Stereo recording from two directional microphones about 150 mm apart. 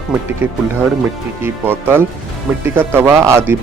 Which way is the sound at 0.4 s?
15° right (ahead or behind).